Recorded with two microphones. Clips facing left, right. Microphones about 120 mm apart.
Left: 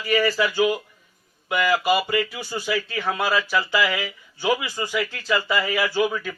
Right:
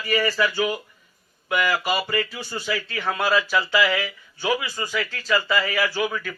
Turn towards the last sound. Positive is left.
turn(degrees=20)  # may be behind; listen again after turning